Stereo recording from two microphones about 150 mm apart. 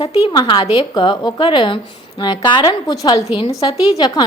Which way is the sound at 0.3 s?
30° left (ahead or behind).